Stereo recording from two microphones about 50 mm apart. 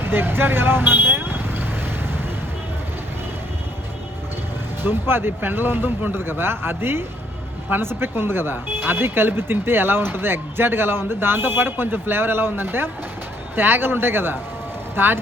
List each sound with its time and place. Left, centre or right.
0.0 s vehicle: right
4.8 s speech: right